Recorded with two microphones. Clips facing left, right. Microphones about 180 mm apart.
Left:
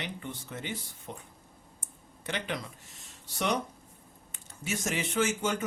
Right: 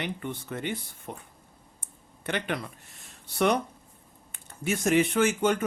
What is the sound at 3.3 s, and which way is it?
Speech, 55° right (ahead or behind).